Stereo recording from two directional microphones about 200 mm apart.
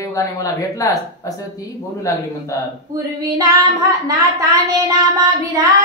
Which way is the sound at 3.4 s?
15° right (ahead or behind).